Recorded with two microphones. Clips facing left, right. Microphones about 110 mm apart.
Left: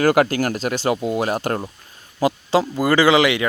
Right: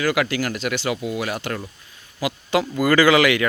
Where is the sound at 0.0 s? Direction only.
45° left (ahead or behind).